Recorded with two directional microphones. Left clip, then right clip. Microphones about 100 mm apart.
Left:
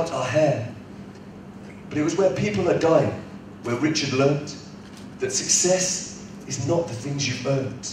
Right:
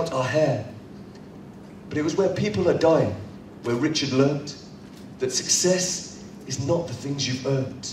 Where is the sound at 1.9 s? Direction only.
25° left (ahead or behind).